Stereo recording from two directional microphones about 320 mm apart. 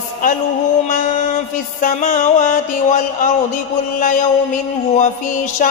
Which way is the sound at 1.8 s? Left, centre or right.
Left.